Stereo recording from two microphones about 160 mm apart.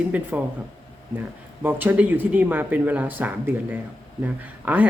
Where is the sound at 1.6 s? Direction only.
10° right (ahead or behind).